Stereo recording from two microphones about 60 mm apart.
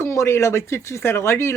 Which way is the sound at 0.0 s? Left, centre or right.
Left.